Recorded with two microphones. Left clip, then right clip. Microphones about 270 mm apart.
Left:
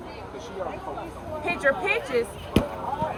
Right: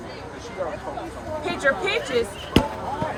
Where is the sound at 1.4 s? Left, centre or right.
Centre.